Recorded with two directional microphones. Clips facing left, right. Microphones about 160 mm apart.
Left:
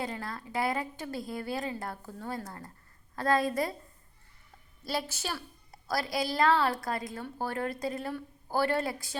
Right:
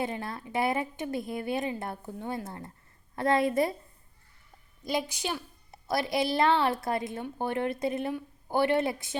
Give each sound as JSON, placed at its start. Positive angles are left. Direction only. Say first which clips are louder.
{"t": 0.0, "sound": "a woman's voice", "louder": "right 3 dB", "side_deg": -25}
{"t": 4.9, "sound": "a woman's voice", "louder": "right 3 dB", "side_deg": -15}